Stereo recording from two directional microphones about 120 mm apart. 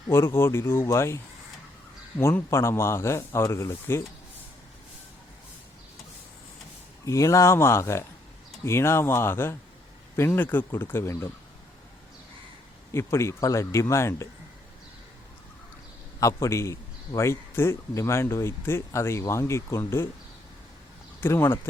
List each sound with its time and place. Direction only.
0.1 s a man's voice: 20° left (ahead or behind)
7.0 s a man's voice: 25° left (ahead or behind)
12.9 s a man's voice: 20° left (ahead or behind)
16.2 s a man's voice: 25° left (ahead or behind)
21.2 s speech: 20° left (ahead or behind)